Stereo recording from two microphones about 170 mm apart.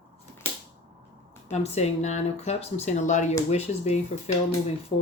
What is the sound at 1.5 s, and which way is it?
Speech, 40° left (ahead or behind).